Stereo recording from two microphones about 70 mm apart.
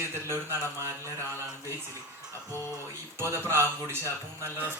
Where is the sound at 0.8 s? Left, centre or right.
Left.